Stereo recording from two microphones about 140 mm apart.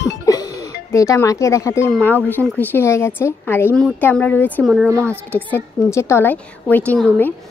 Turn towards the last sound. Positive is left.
turn(degrees=10)  # may be behind; listen again after turning